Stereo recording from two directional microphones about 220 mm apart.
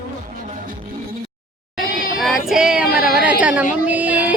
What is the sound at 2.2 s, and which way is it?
Child singing, centre (ahead or behind).